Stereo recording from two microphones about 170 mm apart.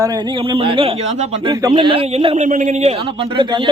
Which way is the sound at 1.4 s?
25° right (ahead or behind).